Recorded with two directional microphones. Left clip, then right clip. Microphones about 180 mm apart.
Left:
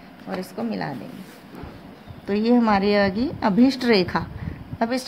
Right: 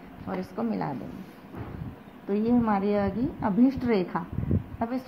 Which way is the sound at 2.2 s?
40° left (ahead or behind).